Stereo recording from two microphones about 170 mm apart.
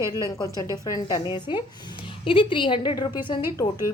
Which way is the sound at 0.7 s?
25° left (ahead or behind).